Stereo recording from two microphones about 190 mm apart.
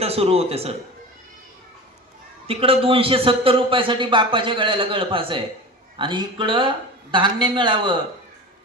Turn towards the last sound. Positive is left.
turn(degrees=-25)  # may be behind; listen again after turning